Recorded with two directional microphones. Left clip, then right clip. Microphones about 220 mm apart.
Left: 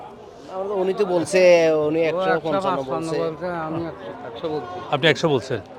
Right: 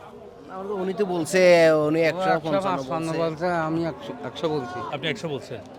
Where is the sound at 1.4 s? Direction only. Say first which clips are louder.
Even; 85° right.